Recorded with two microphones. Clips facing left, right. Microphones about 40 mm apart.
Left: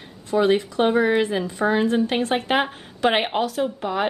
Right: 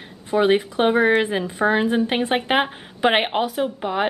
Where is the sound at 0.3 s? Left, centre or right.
Right.